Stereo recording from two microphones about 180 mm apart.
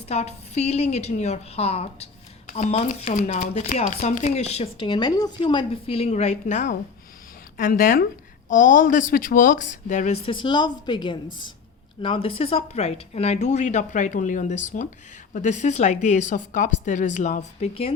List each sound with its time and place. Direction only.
0.1 s speech: 35° left (ahead or behind)
10.2 s a woman's voice: 25° left (ahead or behind)